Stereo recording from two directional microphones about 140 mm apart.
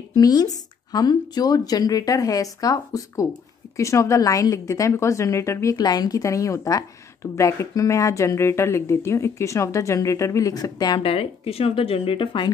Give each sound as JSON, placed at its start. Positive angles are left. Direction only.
{"t": 0.1, "sound": "speech", "side_deg": 25}